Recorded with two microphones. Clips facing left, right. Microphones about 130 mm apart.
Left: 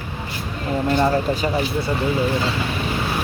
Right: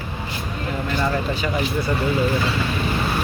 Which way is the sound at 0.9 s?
35° left (ahead or behind).